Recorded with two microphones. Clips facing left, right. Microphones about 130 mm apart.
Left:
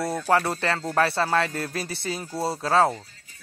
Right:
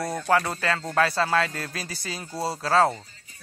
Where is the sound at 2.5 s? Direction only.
20° left (ahead or behind).